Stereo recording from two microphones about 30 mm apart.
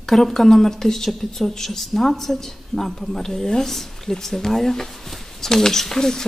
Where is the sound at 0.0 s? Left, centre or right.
Centre.